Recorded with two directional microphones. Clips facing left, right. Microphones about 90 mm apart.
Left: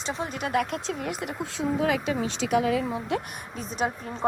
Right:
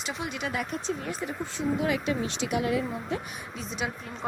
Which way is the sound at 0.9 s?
90° left.